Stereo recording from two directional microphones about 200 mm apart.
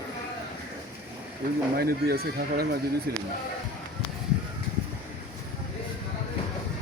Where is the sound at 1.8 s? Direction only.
50° right (ahead or behind).